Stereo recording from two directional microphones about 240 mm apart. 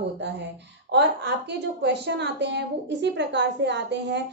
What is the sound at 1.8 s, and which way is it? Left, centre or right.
A woman's voice, right.